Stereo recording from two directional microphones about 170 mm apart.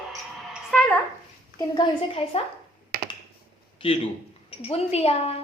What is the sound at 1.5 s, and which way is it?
Speech, 25° left (ahead or behind).